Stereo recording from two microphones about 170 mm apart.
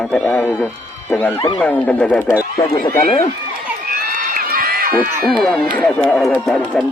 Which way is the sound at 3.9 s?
55° right (ahead or behind).